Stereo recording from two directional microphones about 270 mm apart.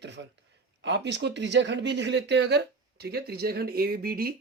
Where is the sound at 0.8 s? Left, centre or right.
Right.